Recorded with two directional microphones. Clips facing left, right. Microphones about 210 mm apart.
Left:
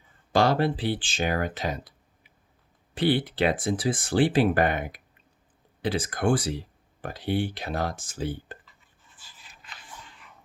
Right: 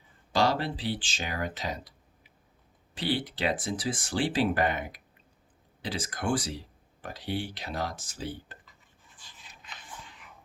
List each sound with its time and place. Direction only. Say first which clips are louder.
0.3 s speech: left 5 dB; 55° left (ahead or behind)
2.9 s speech: left 7 dB; 55° left (ahead or behind)
9.1 s a sound: even; 5° left (ahead or behind)